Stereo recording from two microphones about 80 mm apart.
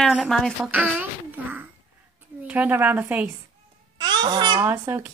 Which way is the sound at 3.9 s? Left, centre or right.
Right.